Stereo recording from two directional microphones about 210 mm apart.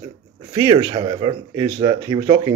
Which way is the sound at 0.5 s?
20° right (ahead or behind).